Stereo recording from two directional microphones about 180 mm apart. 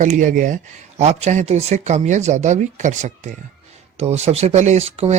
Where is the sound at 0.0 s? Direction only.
45° right (ahead or behind).